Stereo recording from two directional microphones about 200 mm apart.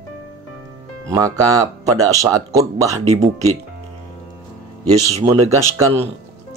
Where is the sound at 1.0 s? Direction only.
15° right (ahead or behind).